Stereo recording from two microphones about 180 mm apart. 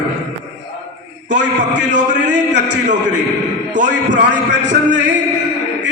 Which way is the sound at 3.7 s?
80° right.